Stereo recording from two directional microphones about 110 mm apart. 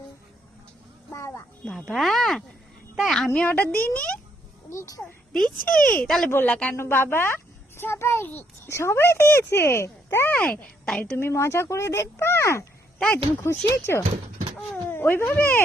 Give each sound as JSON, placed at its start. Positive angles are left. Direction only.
{"t": 1.1, "sound": "music", "side_deg": 25}
{"t": 1.9, "sound": "a child's voice", "side_deg": 0}
{"t": 3.4, "sound": "a woman's voice", "side_deg": 15}
{"t": 4.7, "sound": "a child's voice", "side_deg": 30}
{"t": 5.6, "sound": "a woman's voice", "side_deg": 10}
{"t": 11.2, "sound": "a child's voice", "side_deg": 25}
{"t": 14.1, "sound": "a sound", "side_deg": -90}
{"t": 14.8, "sound": "speech", "side_deg": 20}